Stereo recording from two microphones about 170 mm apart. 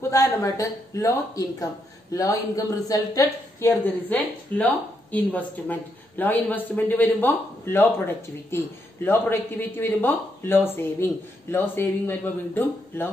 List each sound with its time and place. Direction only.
0.1 s speech: 20° left (ahead or behind)